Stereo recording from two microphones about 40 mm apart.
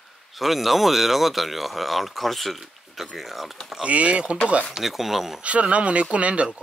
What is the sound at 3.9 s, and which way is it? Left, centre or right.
Speech, right.